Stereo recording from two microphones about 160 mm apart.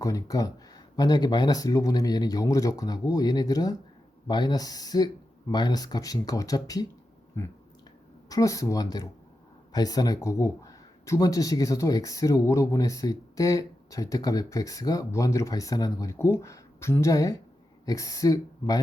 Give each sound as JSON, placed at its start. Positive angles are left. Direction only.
{"t": 0.0, "sound": "speech", "side_deg": 20}
{"t": 7.3, "sound": "a sound", "side_deg": 15}
{"t": 8.3, "sound": "speech", "side_deg": 20}